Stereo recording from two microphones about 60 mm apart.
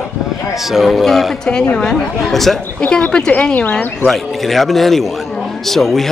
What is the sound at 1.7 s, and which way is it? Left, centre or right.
Speech, centre.